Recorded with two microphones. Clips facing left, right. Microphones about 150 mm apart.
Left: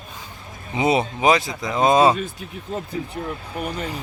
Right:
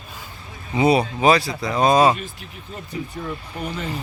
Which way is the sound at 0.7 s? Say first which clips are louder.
Right 2 dB; 20° left (ahead or behind).